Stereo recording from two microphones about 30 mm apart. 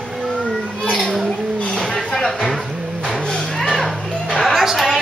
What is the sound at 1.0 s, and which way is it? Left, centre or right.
Speech, centre.